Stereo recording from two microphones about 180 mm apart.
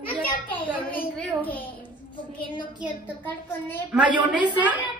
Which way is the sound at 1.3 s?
10° left (ahead or behind).